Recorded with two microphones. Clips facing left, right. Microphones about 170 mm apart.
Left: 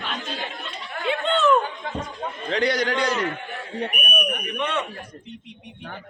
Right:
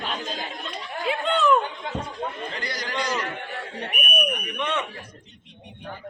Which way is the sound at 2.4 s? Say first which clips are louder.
Left 10 dB; 70° left (ahead or behind).